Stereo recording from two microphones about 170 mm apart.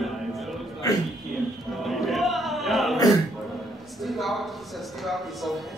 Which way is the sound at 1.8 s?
Centre (ahead or behind).